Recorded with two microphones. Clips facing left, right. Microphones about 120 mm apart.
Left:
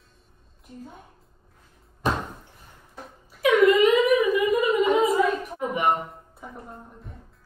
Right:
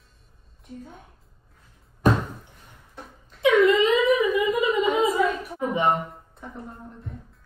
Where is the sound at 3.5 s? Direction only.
25° right (ahead or behind).